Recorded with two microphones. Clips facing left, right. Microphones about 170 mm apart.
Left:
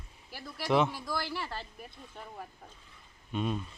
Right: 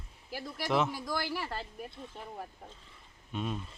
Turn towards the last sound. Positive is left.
turn(degrees=0)  # may be behind; listen again after turning